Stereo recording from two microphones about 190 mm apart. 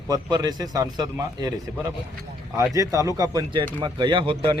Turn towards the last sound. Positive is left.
turn(degrees=-25)  # may be behind; listen again after turning